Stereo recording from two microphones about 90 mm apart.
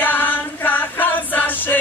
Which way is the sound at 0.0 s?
20° left (ahead or behind).